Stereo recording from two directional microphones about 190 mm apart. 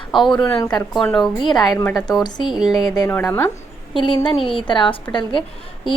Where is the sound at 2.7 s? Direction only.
20° left (ahead or behind).